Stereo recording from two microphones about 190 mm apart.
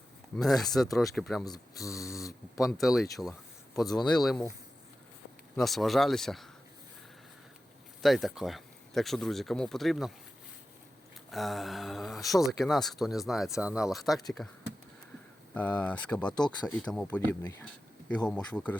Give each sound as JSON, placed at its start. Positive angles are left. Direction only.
{"t": 0.6, "sound": "speech", "side_deg": 0}
{"t": 1.5, "sound": "speech", "side_deg": 20}
{"t": 2.8, "sound": "speech", "side_deg": 0}
{"t": 3.8, "sound": "speech", "side_deg": 20}
{"t": 4.1, "sound": "speech", "side_deg": 0}
{"t": 5.5, "sound": "speech", "side_deg": 0}
{"t": 8.0, "sound": "speech", "side_deg": 0}
{"t": 11.3, "sound": "mantra", "side_deg": 0}
{"t": 12.4, "sound": "speech", "side_deg": 0}
{"t": 18.3, "sound": "speech", "side_deg": 5}